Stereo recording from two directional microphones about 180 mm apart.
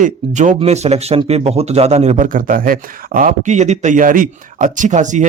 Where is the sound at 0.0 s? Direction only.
40° right (ahead or behind).